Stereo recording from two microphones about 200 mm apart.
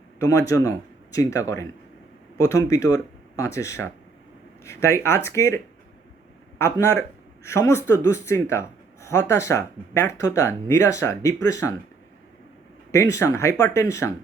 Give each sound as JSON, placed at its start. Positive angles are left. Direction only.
{"t": 0.2, "sound": "speech", "side_deg": 15}
{"t": 6.6, "sound": "speech", "side_deg": 15}
{"t": 12.9, "sound": "speech", "side_deg": 15}